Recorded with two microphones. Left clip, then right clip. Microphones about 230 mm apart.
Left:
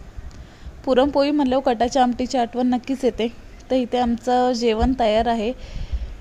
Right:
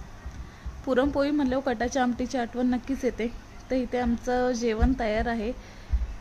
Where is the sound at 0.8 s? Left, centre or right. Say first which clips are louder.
Left 7 dB; left.